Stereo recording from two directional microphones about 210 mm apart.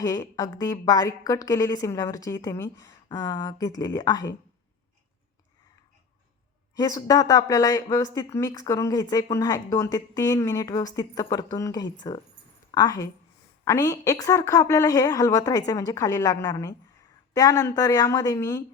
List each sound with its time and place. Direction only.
0.0 s speech: 15° left (ahead or behind)
6.7 s speech: 15° left (ahead or behind)